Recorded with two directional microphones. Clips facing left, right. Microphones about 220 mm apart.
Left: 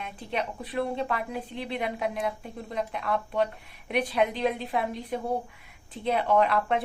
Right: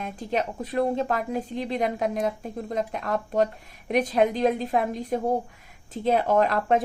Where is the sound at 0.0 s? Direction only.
40° right (ahead or behind).